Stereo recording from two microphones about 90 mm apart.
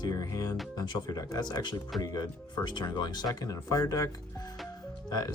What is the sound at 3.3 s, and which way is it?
Speech, 40° left (ahead or behind).